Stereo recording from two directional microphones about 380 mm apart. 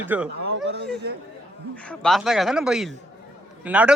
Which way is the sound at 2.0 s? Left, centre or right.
Centre.